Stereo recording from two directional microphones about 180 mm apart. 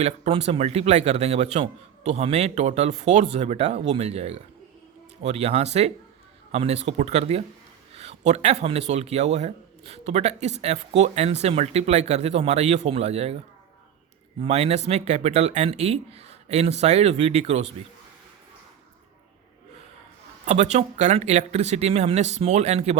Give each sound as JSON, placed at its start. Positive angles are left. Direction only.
{"t": 0.0, "sound": "a man's voice", "side_deg": -35}
{"t": 14.4, "sound": "a man's voice", "side_deg": -35}
{"t": 20.4, "sound": "a man's voice", "side_deg": -40}